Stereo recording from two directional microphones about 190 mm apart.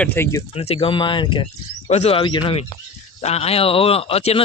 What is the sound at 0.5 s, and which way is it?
Speech, 30° left (ahead or behind).